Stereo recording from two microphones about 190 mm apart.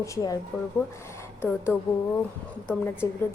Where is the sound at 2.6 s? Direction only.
10° left (ahead or behind).